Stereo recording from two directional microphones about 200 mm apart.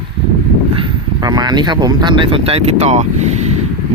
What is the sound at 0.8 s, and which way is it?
A man's voice, 20° right (ahead or behind).